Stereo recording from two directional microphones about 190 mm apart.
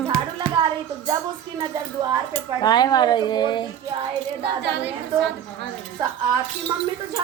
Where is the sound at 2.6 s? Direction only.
20° left (ahead or behind).